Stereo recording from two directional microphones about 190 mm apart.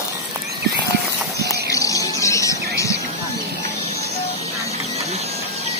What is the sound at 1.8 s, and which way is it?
Music, 15° left (ahead or behind).